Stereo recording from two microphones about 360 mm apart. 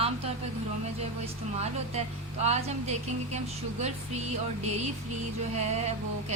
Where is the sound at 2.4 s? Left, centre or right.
Centre.